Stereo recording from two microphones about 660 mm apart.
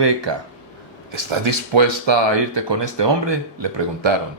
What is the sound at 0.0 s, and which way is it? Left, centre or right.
Speech, right.